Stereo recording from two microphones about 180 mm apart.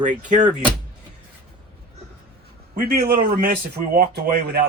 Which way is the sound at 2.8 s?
55° right (ahead or behind).